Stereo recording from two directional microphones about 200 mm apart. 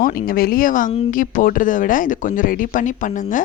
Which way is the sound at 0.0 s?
45° left (ahead or behind).